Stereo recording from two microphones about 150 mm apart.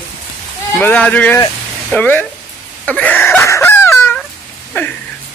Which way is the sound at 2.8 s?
10° left (ahead or behind).